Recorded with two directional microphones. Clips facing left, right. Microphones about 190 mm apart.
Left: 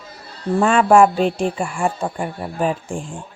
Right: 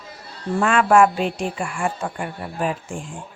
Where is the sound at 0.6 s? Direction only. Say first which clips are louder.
Left 3 dB; 30° left (ahead or behind).